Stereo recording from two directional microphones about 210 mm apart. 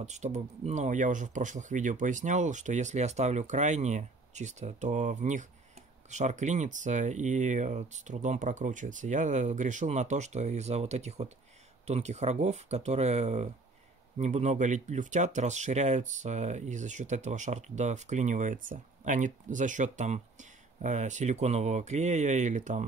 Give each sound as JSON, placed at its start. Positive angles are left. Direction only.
{"t": 0.0, "sound": "speech", "side_deg": -35}